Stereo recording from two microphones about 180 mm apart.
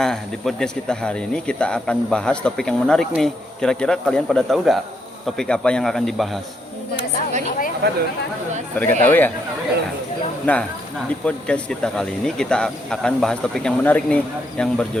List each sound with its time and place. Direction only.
0.0 s speech: 5° left (ahead or behind)
7.8 s speech: 70° right (ahead or behind)
8.8 s speech: 10° left (ahead or behind)
10.4 s speech: 5° left (ahead or behind)